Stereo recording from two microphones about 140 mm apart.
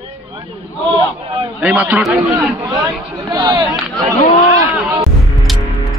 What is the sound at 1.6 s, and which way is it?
Speech, 10° right (ahead or behind).